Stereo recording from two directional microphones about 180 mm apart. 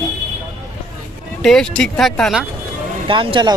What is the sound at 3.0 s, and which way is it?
Speech, 30° right (ahead or behind).